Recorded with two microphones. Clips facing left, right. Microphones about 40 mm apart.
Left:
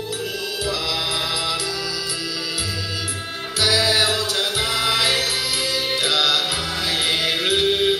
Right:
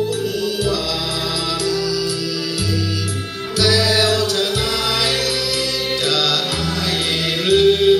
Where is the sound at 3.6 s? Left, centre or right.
Centre.